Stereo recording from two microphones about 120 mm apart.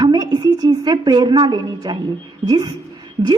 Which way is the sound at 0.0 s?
35° right (ahead or behind).